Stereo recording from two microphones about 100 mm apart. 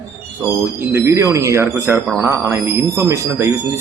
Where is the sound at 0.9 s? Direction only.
30° right (ahead or behind).